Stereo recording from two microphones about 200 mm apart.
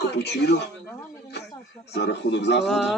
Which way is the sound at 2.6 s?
Centre (ahead or behind).